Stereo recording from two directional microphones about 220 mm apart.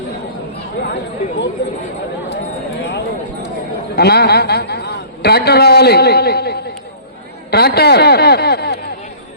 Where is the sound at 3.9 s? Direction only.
45° left (ahead or behind).